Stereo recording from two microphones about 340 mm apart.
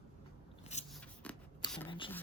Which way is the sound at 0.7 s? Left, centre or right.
Centre.